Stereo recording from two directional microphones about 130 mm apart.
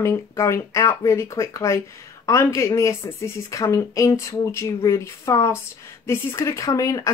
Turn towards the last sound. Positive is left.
turn(degrees=25)  # may be behind; listen again after turning